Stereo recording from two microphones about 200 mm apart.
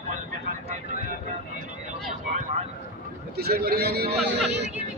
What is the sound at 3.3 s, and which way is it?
Speech, 50° right (ahead or behind).